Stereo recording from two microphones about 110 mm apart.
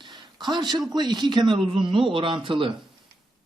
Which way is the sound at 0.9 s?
40° right (ahead or behind).